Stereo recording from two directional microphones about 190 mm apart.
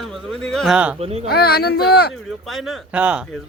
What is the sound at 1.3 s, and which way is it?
Speech, 55° left (ahead or behind).